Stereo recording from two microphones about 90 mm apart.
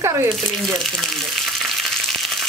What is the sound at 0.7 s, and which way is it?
Speech, 5° left (ahead or behind).